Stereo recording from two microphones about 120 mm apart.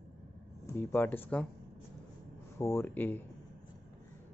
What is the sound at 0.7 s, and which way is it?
Speech, 20° left (ahead or behind).